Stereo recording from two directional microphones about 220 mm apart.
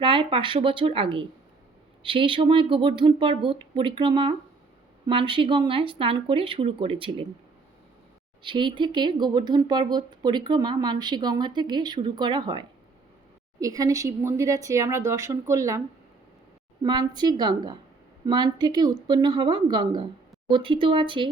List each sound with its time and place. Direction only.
0.0 s speech: 25° right (ahead or behind)
8.4 s speech: 20° right (ahead or behind)
16.8 s speech: 20° right (ahead or behind)